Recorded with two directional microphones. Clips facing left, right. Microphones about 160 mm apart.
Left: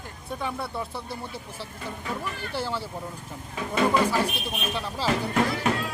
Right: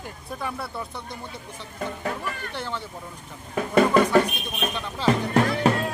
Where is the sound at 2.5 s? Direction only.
5° left (ahead or behind).